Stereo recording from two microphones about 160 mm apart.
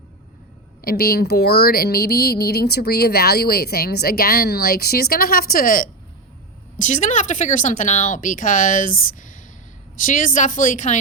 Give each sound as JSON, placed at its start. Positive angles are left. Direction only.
{"t": 0.8, "sound": "speech", "side_deg": 70}